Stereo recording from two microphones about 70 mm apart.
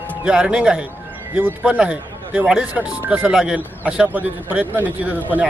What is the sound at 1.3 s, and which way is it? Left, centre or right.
Speech, right.